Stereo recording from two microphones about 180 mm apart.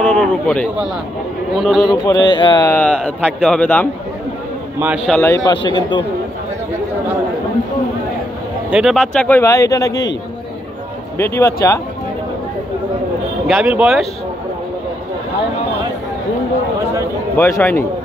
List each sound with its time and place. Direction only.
0.0 s speech: 5° left (ahead or behind)
1.9 s speech: 20° left (ahead or behind)
2.7 s speech: 5° left (ahead or behind)
4.7 s speech: 5° right (ahead or behind)
5.2 s speech: 20° left (ahead or behind)
8.6 s speech: 5° right (ahead or behind)
9.4 s speech: 20° left (ahead or behind)
11.1 s speech: 15° left (ahead or behind)
13.5 s speech: 5° right (ahead or behind)
17.4 s speech: 15° left (ahead or behind)